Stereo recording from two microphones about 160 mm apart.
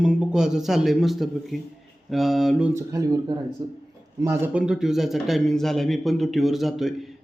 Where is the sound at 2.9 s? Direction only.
25° right (ahead or behind); by 7.1 s centre (ahead or behind).